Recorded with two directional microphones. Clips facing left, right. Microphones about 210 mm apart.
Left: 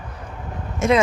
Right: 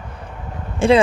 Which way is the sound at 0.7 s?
30° right (ahead or behind).